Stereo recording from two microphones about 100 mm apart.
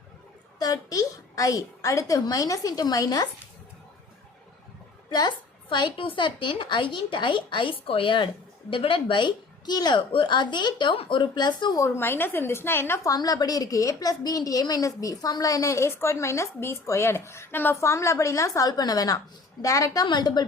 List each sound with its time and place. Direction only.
0.6 s a woman's voice: 40° left (ahead or behind)
5.0 s a woman's voice: 45° left (ahead or behind)
10.1 s speech: 55° left (ahead or behind)
11.8 s a woman's voice: 25° left (ahead or behind)
13.1 s a woman's voice: 40° left (ahead or behind)